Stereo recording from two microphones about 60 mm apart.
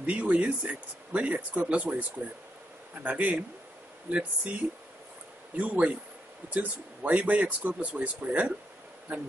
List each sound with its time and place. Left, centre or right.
0.0 s speech: right
5.6 s speech: right